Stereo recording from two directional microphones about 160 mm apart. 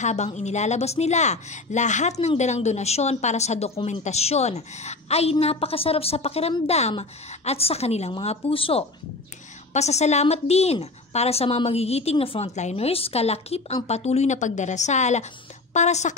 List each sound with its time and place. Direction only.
0.0 s a woman's voice: 45° left (ahead or behind)